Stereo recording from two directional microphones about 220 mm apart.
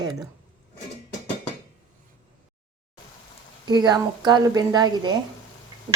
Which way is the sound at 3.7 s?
20° right (ahead or behind).